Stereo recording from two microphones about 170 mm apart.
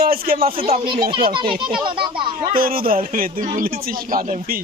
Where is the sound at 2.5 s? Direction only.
60° right (ahead or behind).